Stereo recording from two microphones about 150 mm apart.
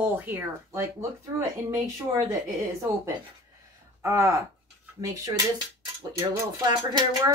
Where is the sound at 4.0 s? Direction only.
20° right (ahead or behind).